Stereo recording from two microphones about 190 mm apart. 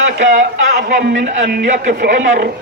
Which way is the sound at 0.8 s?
60° right (ahead or behind).